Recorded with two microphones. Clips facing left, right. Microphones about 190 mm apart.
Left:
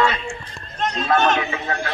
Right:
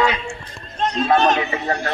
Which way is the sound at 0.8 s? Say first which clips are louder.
Right 2 dB; 30° right (ahead or behind).